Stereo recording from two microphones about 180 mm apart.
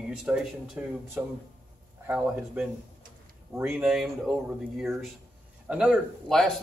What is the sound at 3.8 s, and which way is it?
Speech, centre (ahead or behind).